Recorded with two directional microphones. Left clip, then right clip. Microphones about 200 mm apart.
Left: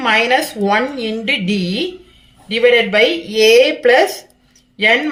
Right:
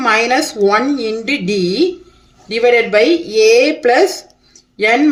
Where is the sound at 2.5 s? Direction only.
60° right (ahead or behind).